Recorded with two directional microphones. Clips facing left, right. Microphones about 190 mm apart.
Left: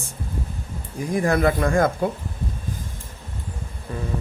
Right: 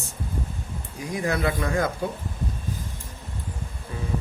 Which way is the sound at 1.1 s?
50° left (ahead or behind).